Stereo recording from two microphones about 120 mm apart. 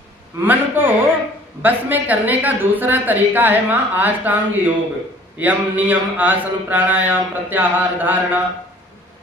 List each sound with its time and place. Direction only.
0.5 s speech: 15° right (ahead or behind)